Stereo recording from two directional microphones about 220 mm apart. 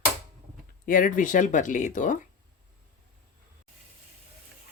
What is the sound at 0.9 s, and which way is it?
Speech, 40° left (ahead or behind).